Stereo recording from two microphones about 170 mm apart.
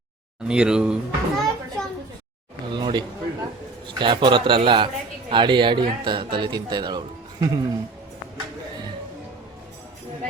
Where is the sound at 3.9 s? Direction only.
30° right (ahead or behind).